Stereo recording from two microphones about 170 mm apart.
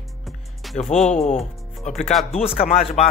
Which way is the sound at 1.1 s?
50° left (ahead or behind).